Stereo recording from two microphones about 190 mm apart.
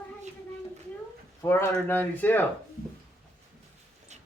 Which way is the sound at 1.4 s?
10° left (ahead or behind).